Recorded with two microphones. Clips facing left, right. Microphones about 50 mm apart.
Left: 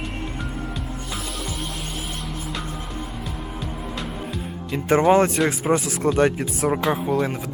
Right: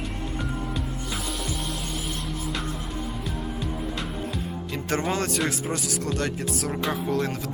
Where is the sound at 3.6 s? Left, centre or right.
Centre.